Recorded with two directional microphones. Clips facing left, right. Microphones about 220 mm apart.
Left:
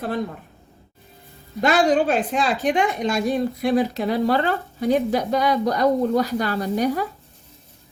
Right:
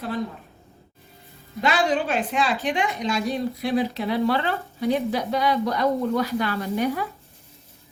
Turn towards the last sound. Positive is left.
turn(degrees=40)  # may be behind; listen again after turning